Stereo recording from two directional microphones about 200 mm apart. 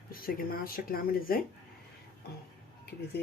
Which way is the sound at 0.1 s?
45° left (ahead or behind).